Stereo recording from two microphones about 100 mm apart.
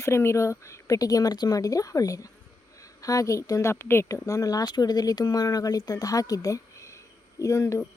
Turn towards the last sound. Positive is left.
turn(degrees=30)  # may be behind; listen again after turning